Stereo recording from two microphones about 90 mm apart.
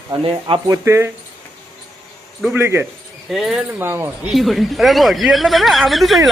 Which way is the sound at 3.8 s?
25° right (ahead or behind).